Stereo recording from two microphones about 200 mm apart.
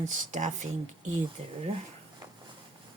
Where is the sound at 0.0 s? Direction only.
40° right (ahead or behind).